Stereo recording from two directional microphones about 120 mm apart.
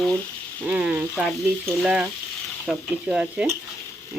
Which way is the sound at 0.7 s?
10° right (ahead or behind).